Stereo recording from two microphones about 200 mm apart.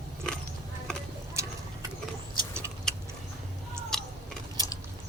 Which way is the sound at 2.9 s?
5° left (ahead or behind).